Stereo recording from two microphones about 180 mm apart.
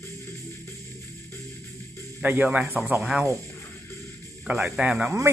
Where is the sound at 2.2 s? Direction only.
10° right (ahead or behind).